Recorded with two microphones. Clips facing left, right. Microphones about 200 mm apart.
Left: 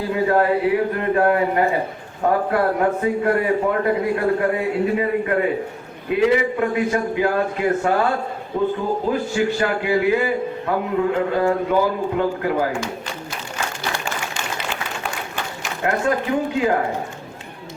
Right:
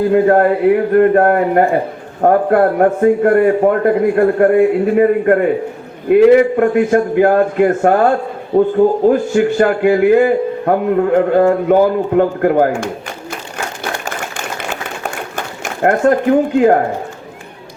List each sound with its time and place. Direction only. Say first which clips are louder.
0.1 s a man's voice: right 4 dB; 55° right (ahead or behind)
15.4 s speech: right 10 dB; 50° right (ahead or behind)